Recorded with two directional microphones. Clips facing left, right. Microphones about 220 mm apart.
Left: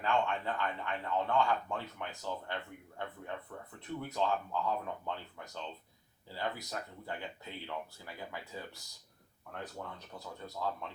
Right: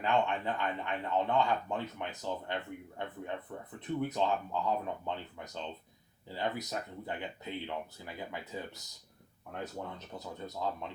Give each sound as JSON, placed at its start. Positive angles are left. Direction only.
{"t": 0.0, "sound": "speech", "side_deg": -20}